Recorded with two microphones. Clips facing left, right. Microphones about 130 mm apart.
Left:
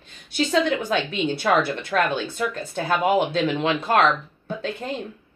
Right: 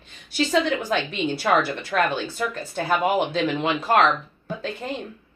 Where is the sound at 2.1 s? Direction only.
5° right (ahead or behind).